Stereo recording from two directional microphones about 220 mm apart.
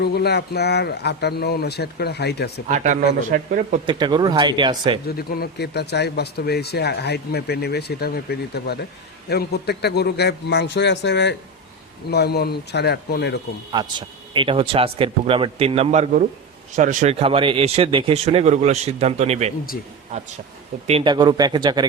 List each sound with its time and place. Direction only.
0.0 s speech: 45° left (ahead or behind)
2.6 s speech: 35° right (ahead or behind)
3.8 s speech: 20° right (ahead or behind)
5.0 s speech: 45° left (ahead or behind)
13.7 s speech: 20° right (ahead or behind)
20.8 s speech: 25° right (ahead or behind)